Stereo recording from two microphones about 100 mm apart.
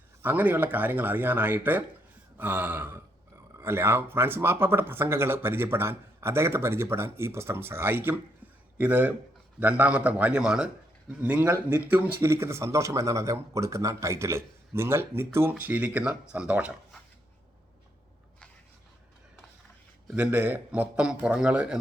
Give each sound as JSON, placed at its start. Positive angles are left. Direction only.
{"t": 0.2, "sound": "a man's voice", "side_deg": -20}
{"t": 12.2, "sound": "a man's voice", "side_deg": -30}
{"t": 20.1, "sound": "a man's voice", "side_deg": -15}